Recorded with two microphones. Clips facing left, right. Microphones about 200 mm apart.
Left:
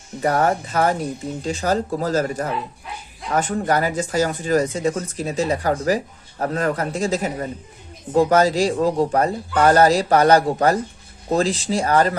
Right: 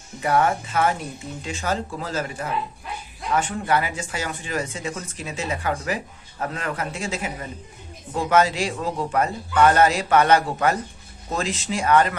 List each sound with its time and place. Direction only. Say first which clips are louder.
0.2 s speech: left 2 dB; 40° left (ahead or behind)